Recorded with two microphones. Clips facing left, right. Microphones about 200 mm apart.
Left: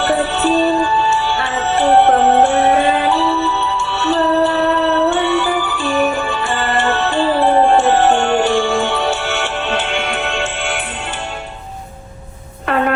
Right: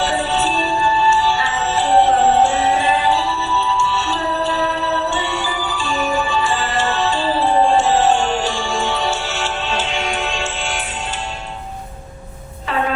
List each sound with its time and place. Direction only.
0.0 s music: 60° left (ahead or behind)